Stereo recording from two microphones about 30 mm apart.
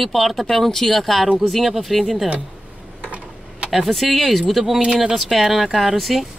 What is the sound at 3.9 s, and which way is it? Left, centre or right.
Speech, centre.